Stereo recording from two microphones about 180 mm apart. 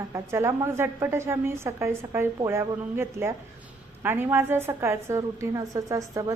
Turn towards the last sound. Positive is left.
turn(degrees=-20)  # may be behind; listen again after turning